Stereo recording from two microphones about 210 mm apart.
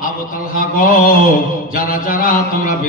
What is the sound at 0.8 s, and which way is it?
A man's voice, 40° left (ahead or behind).